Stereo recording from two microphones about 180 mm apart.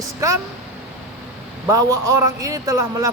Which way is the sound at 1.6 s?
15° right (ahead or behind).